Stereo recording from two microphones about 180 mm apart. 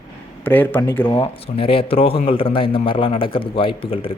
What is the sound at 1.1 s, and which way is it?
A man's voice, 25° left (ahead or behind).